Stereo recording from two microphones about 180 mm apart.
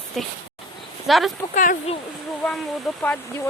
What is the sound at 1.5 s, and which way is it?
Speech, 50° left (ahead or behind).